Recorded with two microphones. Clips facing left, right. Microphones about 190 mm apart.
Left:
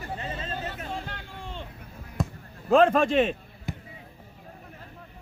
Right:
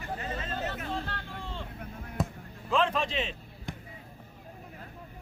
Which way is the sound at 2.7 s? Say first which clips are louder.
Left 9 dB; 50° left (ahead or behind).